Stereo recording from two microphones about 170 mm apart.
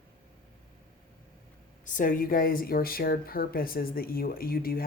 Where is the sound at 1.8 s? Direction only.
50° left (ahead or behind).